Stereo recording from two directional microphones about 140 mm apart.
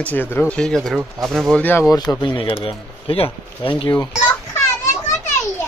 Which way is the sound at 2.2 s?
35° left (ahead or behind).